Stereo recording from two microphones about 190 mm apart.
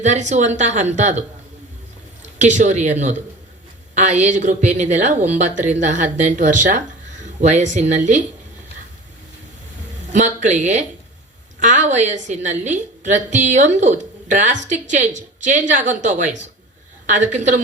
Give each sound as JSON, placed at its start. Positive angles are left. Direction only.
{"t": 0.0, "sound": "a woman's voice", "side_deg": -40}
{"t": 2.4, "sound": "a woman's voice", "side_deg": -40}
{"t": 10.1, "sound": "a woman's voice", "side_deg": -40}